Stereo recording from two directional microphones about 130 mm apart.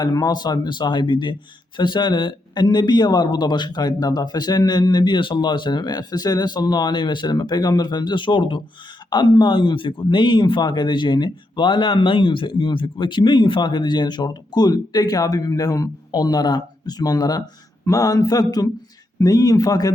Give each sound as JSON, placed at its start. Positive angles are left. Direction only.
{"t": 0.0, "sound": "a man's voice", "side_deg": 30}